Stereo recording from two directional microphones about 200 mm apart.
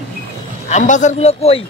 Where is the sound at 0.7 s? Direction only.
40° left (ahead or behind).